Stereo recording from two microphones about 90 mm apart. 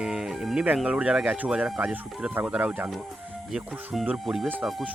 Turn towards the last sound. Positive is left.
turn(degrees=-5)  # may be behind; listen again after turning